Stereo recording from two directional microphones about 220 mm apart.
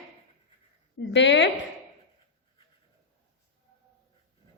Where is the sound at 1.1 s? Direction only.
55° left (ahead or behind).